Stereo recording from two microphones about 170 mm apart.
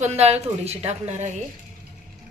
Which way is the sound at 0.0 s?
40° right (ahead or behind).